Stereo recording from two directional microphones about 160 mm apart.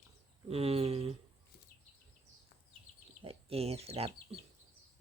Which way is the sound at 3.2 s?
35° right (ahead or behind).